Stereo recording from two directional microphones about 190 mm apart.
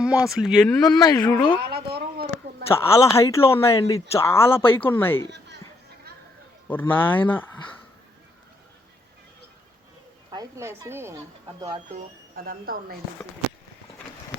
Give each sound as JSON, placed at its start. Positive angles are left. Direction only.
{"t": 0.0, "sound": "speech", "side_deg": -5}
{"t": 0.9, "sound": "speech", "side_deg": 20}
{"t": 1.6, "sound": "a sound", "side_deg": -60}
{"t": 2.6, "sound": "speech", "side_deg": 15}
{"t": 6.7, "sound": "speech", "side_deg": 10}
{"t": 10.3, "sound": "speech", "side_deg": -15}
{"t": 11.9, "sound": "speech", "side_deg": -45}